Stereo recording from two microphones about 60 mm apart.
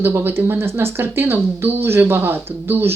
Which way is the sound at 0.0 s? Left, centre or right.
Right.